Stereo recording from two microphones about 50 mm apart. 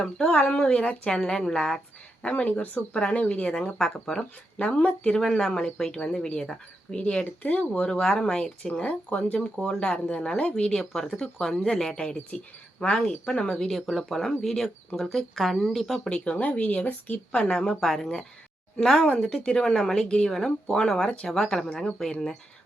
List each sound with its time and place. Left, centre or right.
0.0 s speech: left
2.2 s speech: left; by 6.6 s centre
6.9 s speech: left
13.7 s speech: centre
16.0 s speech: left
17.3 s speech: centre